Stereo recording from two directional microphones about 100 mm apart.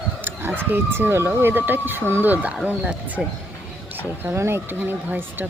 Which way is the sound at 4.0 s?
25° right (ahead or behind).